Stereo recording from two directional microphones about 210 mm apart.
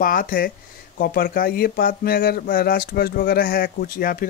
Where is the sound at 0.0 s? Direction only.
40° left (ahead or behind).